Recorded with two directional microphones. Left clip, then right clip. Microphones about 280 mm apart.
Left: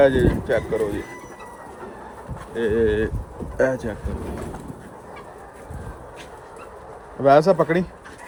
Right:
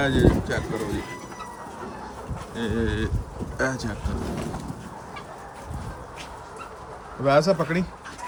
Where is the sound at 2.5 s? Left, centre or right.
Centre.